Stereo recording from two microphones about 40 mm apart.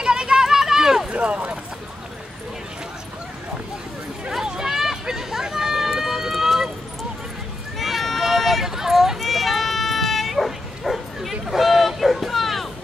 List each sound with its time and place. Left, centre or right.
0.0 s a sound: centre
1.1 s run: right
4.5 s run: centre
7.8 s run: centre
9.3 s bow-wow: centre